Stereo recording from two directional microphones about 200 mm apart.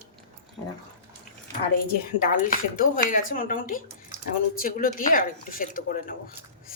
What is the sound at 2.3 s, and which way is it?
Speech, 40° left (ahead or behind).